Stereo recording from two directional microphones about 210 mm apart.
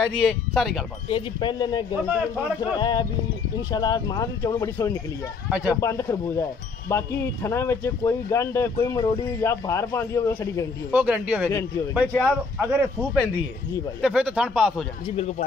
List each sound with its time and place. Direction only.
0.0 s speech: centre (ahead or behind)
1.0 s speech: 25° left (ahead or behind)
5.5 s speech: 5° right (ahead or behind)
5.8 s speech: 15° left (ahead or behind)
10.9 s speech: 5° right (ahead or behind)
15.0 s speech: 30° left (ahead or behind)